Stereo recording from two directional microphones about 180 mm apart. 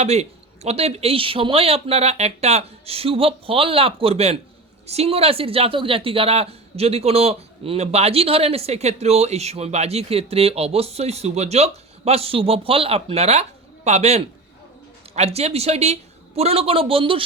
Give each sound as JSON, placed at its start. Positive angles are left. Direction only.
{"t": 0.0, "sound": "speech", "side_deg": -35}